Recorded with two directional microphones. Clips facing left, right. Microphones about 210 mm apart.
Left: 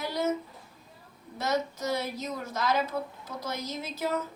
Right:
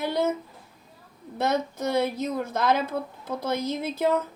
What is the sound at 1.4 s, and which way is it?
A woman's voice, 55° right (ahead or behind).